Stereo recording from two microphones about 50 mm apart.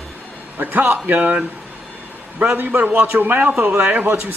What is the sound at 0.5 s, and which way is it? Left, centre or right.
Speech, right.